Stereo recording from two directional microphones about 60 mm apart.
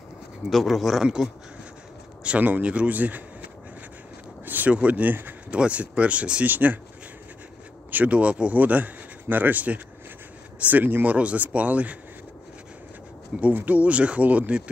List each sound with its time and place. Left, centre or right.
0.5 s speech: centre
2.2 s speech: right
4.5 s speech: right
6.4 s speech: right
7.9 s speech: right
13.4 s speech: right